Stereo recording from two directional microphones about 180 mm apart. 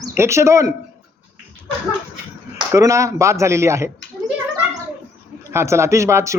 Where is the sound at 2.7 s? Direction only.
15° right (ahead or behind).